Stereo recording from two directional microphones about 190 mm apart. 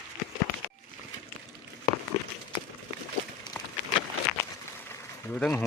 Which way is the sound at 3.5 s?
20° left (ahead or behind).